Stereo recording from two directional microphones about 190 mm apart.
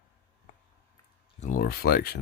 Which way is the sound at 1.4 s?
45° left (ahead or behind).